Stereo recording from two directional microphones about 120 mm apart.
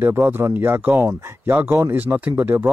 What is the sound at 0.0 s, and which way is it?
Speech, 15° right (ahead or behind).